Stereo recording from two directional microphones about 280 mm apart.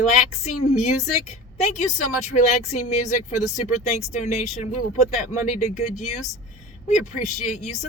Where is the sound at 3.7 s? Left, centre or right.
Left.